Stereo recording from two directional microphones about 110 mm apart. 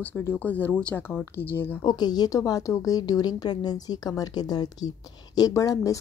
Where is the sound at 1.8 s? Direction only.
40° left (ahead or behind).